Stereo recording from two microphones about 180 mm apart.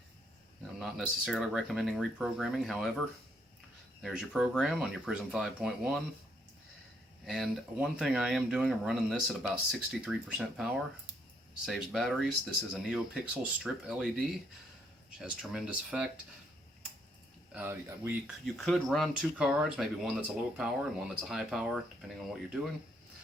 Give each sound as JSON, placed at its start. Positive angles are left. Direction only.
{"t": 0.8, "sound": "speech", "side_deg": 0}
{"t": 4.0, "sound": "speech", "side_deg": -5}
{"t": 7.3, "sound": "speech", "side_deg": 0}
{"t": 17.5, "sound": "speech", "side_deg": -10}
{"t": 18.4, "sound": "speech", "side_deg": 0}